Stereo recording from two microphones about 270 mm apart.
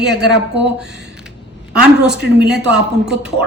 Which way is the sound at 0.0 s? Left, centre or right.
Right.